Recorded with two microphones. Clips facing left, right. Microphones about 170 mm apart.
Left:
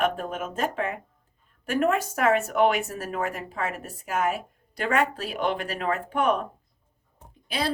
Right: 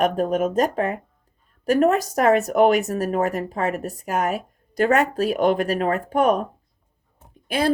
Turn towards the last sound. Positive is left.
turn(degrees=-50)  # may be behind; listen again after turning